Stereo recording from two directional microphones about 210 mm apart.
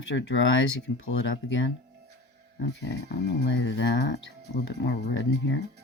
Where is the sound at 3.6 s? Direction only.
55° left (ahead or behind).